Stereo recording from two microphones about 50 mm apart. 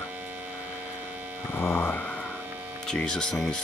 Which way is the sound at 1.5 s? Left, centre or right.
Left.